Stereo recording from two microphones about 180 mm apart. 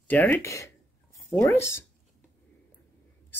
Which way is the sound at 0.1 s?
10° left (ahead or behind).